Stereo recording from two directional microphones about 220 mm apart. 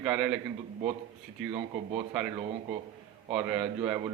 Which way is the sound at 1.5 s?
25° right (ahead or behind).